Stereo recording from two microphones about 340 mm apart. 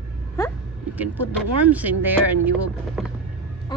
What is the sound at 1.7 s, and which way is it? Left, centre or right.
Speech, centre.